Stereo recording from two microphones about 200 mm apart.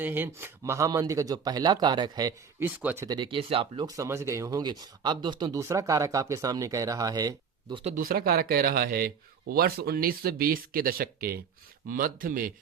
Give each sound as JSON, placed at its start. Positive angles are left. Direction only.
{"t": 0.0, "sound": "speech", "side_deg": -10}
{"t": 7.9, "sound": "speech", "side_deg": -45}